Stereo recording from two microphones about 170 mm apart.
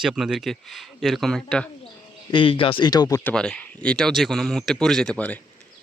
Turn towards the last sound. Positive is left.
turn(degrees=5)  # may be behind; listen again after turning